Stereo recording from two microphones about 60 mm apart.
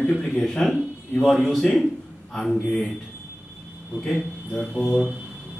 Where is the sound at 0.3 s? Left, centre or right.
Centre.